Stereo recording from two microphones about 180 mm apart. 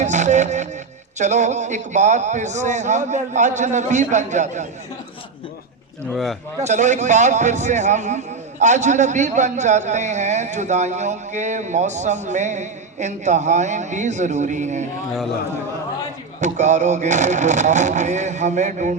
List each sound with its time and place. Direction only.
0.0 s music: 40° right (ahead or behind)
1.2 s speech: 40° right (ahead or behind)
6.6 s speech: 40° right (ahead or behind)
16.4 s speech: 40° right (ahead or behind)